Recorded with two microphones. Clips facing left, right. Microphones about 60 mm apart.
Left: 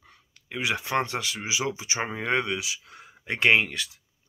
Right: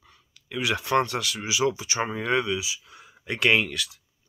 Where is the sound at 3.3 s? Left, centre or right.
Left.